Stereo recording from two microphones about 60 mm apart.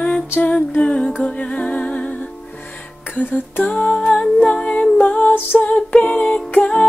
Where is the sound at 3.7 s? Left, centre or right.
Centre.